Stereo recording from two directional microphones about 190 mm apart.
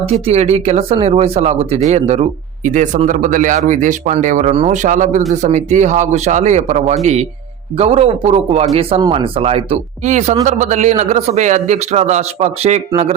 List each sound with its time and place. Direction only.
0.1 s a man's voice: 35° right (ahead or behind)